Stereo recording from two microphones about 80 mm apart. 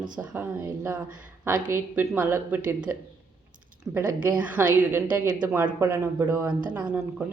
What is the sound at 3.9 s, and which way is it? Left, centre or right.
Speech, right.